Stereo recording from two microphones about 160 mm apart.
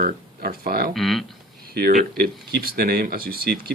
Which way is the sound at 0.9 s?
Centre (ahead or behind).